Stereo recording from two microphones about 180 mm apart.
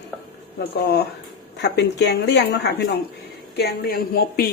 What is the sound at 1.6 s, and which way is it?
A woman's voice, 70° left (ahead or behind).